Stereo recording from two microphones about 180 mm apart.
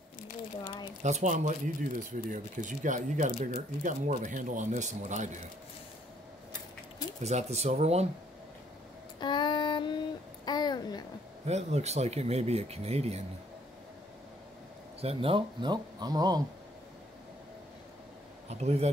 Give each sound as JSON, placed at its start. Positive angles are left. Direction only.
{"t": 1.0, "sound": "speech", "side_deg": -40}
{"t": 7.2, "sound": "speech", "side_deg": -40}
{"t": 9.2, "sound": "child singing", "side_deg": 25}
{"t": 10.4, "sound": "babbling", "side_deg": 25}
{"t": 11.4, "sound": "speech", "side_deg": -35}
{"t": 15.0, "sound": "speech", "side_deg": -30}
{"t": 18.5, "sound": "speech", "side_deg": -35}